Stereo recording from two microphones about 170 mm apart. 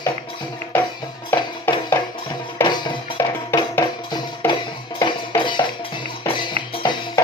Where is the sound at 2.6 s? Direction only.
25° left (ahead or behind).